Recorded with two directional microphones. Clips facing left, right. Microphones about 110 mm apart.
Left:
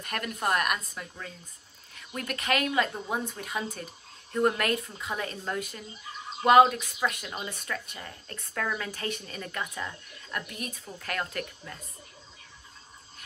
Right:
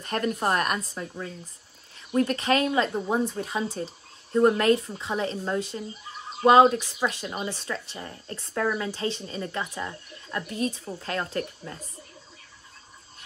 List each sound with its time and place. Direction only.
0.0 s speech: 30° right (ahead or behind)